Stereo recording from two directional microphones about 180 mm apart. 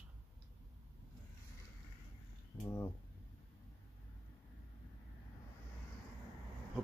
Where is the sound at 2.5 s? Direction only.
15° left (ahead or behind).